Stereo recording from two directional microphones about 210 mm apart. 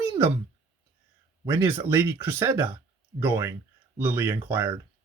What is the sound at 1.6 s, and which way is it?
Speech, 10° right (ahead or behind).